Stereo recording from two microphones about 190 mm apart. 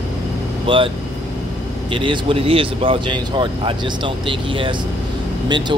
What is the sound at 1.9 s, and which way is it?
Speech, 25° right (ahead or behind).